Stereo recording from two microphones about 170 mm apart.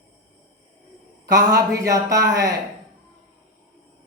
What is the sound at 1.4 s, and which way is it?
A man's voice, 20° right (ahead or behind).